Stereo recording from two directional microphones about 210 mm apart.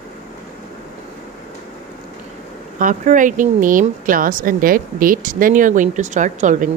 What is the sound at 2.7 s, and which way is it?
Speech, 40° right (ahead or behind).